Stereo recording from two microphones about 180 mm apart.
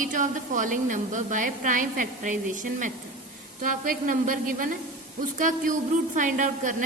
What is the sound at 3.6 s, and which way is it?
A woman's voice, 50° right (ahead or behind).